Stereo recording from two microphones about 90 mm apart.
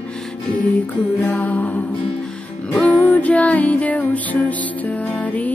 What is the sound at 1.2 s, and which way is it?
Music, 15° left (ahead or behind).